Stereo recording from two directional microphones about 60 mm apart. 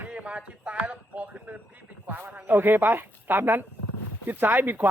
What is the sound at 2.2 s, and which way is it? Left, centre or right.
Speech, right.